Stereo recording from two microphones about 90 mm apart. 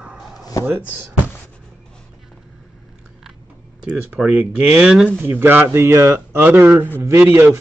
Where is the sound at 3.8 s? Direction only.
10° right (ahead or behind).